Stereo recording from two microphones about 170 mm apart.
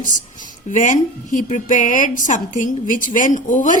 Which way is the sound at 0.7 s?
50° left (ahead or behind).